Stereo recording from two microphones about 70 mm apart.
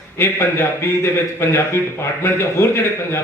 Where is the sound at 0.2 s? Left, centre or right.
Left.